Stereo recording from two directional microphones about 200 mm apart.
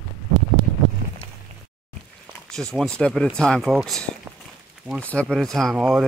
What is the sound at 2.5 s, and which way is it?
Speech, 5° left (ahead or behind).